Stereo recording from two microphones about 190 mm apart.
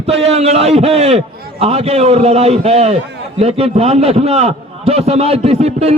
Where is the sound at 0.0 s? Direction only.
30° right (ahead or behind).